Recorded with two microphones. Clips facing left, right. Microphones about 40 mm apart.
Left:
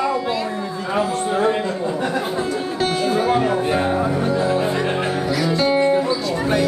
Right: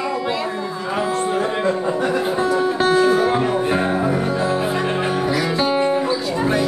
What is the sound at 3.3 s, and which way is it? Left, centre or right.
Music, centre.